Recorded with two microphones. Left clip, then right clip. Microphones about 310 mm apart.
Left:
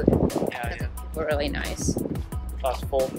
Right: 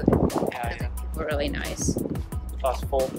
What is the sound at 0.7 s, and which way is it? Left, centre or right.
Speech, centre.